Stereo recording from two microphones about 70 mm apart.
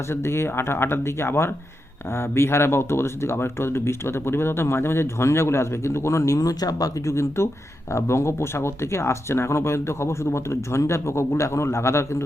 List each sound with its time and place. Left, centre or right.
0.1 s speech: left